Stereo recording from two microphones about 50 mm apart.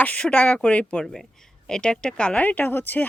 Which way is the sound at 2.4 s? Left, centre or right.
Left.